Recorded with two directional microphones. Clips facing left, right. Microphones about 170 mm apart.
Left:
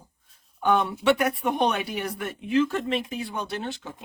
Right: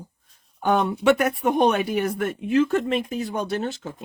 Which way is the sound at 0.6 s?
45° right (ahead or behind).